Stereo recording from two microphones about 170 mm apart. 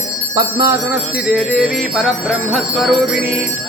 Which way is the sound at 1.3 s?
Centre (ahead or behind).